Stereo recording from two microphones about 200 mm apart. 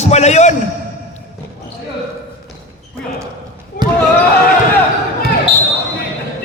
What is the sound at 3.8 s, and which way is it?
Basketball bounce, 45° left (ahead or behind).